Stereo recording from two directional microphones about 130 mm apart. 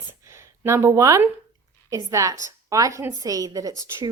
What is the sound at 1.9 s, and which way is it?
A woman's voice, 25° right (ahead or behind).